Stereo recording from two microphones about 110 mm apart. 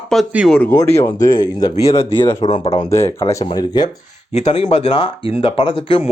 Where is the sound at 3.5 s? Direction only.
40° left (ahead or behind).